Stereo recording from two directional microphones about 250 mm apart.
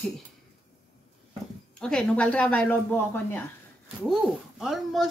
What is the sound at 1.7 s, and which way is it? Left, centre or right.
Speech, centre.